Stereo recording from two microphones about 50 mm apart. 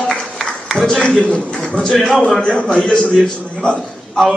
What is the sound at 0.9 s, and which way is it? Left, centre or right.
A man's voice, centre.